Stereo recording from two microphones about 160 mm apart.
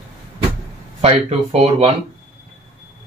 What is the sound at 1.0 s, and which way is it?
Speech, 40° right (ahead or behind).